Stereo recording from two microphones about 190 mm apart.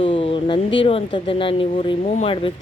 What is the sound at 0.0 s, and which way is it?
Speech, 30° left (ahead or behind).